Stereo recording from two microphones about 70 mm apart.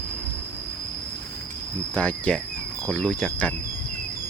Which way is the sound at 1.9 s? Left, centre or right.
Left.